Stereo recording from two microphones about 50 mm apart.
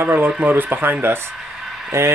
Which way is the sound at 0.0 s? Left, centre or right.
Right.